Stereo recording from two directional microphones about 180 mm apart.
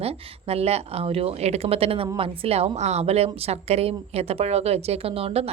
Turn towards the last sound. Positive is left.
turn(degrees=-35)  # may be behind; listen again after turning